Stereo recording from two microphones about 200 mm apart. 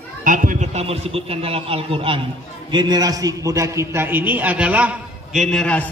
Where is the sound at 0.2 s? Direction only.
40° right (ahead or behind).